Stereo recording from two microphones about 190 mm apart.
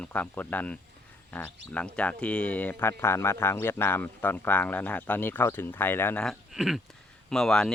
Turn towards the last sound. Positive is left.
turn(degrees=5)  # may be behind; listen again after turning